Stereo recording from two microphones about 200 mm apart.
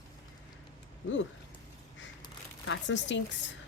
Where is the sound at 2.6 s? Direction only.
70° left (ahead or behind).